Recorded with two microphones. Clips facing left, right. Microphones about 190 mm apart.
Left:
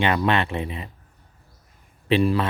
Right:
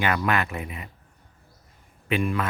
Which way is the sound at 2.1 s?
30° left (ahead or behind).